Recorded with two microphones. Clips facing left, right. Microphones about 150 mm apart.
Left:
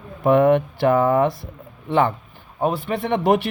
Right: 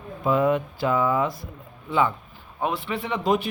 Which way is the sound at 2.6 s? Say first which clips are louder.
Left 5 dB; 40° left (ahead or behind).